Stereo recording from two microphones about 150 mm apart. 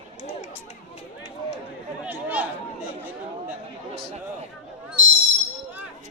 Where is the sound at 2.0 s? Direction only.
10° right (ahead or behind).